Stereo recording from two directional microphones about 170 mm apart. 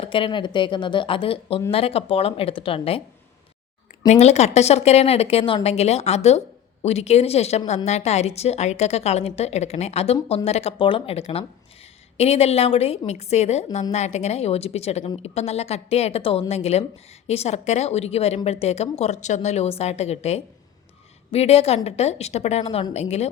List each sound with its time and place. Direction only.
0.0 s a woman's voice: 30° left (ahead or behind)
4.0 s a woman's voice: 40° left (ahead or behind)